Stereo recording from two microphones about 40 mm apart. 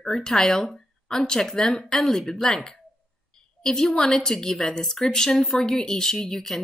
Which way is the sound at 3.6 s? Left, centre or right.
Centre.